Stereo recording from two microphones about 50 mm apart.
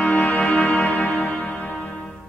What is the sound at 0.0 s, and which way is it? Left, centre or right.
Music, left.